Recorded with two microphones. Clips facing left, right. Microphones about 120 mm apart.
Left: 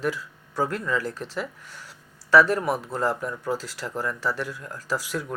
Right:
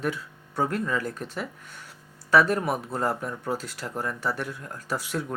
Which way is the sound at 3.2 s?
25° right (ahead or behind).